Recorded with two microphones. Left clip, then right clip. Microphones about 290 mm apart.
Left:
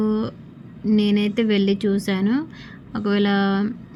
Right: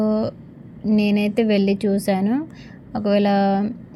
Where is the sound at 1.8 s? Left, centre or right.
Centre.